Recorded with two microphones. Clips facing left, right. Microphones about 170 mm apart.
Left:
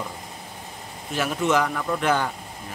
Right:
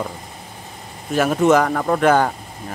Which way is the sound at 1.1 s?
45° right (ahead or behind).